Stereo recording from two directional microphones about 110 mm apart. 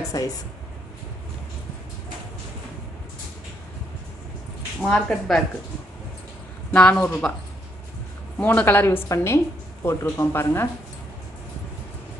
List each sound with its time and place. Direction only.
0.1 s speech: 30° left (ahead or behind)
4.8 s a woman's voice: 5° left (ahead or behind)
6.7 s speech: 10° left (ahead or behind)
8.4 s a woman's voice: 15° left (ahead or behind)